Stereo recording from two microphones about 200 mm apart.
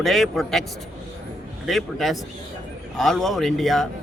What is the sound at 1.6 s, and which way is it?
A man's voice, centre (ahead or behind).